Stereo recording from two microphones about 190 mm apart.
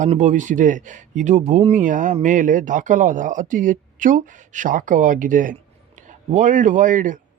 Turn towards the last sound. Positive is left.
turn(degrees=-45)  # may be behind; listen again after turning